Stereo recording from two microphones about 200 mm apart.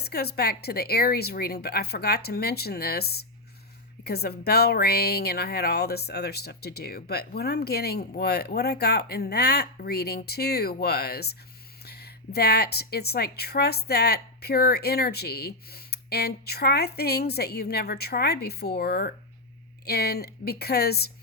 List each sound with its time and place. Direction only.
0.0 s a woman's voice: 50° left (ahead or behind)